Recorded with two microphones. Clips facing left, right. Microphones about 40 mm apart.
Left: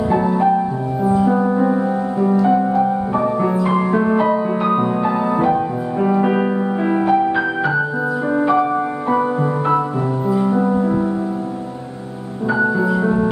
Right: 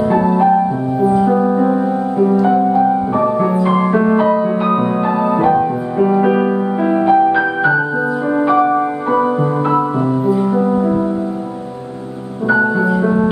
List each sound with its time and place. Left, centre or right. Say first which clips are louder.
0.2 s music: right 4 dB; centre
3.7 s music: right 3 dB; right
4.0 s music: right 3 dB; centre
12.4 s music: right 3 dB; centre